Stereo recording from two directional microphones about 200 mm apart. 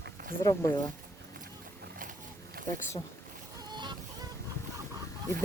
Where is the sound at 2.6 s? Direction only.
45° right (ahead or behind).